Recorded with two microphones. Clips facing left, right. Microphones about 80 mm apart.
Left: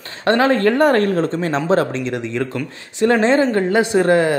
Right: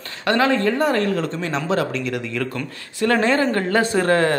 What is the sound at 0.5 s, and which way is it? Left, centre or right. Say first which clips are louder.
Speech: left 5 dB; left.